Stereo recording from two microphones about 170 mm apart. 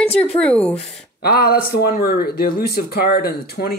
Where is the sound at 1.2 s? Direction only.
65° left (ahead or behind).